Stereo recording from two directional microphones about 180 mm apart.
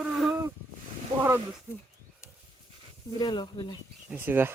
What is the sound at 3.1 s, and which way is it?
Speech, 25° left (ahead or behind).